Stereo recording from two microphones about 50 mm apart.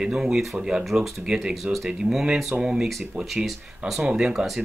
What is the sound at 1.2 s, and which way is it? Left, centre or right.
Speech, centre.